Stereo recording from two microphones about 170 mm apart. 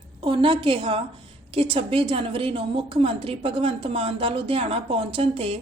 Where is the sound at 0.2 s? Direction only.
30° right (ahead or behind).